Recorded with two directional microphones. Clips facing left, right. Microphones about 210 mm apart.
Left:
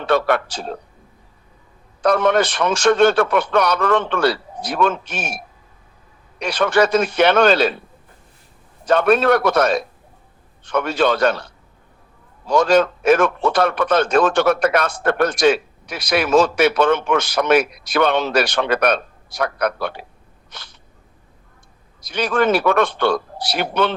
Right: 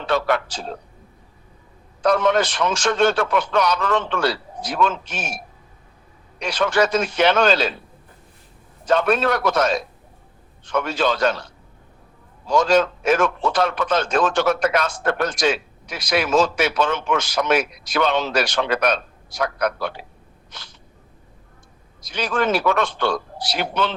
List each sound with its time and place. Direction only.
0.0 s a man's voice: 55° left (ahead or behind)
2.0 s a man's voice: 60° left (ahead or behind)
6.4 s a man's voice: 60° left (ahead or behind)
8.9 s a man's voice: 60° left (ahead or behind)
20.5 s sneeze: 60° left (ahead or behind)
22.0 s a man's voice: 60° left (ahead or behind)